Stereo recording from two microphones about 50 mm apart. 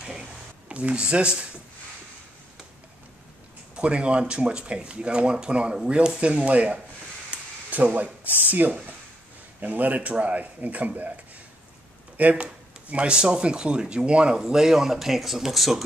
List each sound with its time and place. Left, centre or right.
0.7 s speech: right
3.7 s speech: right
12.2 s speech: right; by 15.8 s centre